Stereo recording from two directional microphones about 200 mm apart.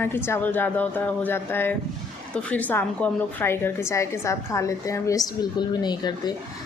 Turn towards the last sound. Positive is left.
turn(degrees=20)  # may be behind; listen again after turning